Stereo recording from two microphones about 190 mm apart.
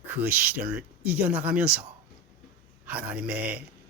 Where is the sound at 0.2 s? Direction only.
10° right (ahead or behind).